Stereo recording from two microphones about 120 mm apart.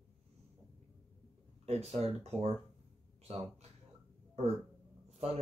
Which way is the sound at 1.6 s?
60° right (ahead or behind).